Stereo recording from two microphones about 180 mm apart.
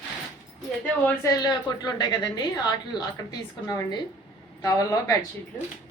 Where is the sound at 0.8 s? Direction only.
10° left (ahead or behind).